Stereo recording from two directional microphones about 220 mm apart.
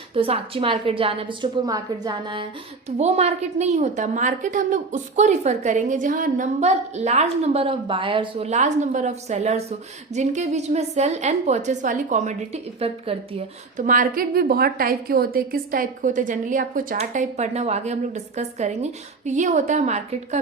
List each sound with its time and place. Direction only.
0.1 s a woman's voice: 25° right (ahead or behind)
13.8 s a woman's voice: 40° right (ahead or behind)